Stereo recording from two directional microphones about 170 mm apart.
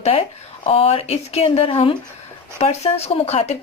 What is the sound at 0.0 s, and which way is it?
Speech, 35° left (ahead or behind).